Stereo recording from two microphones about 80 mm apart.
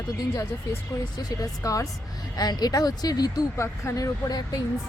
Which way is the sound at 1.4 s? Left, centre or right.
Left.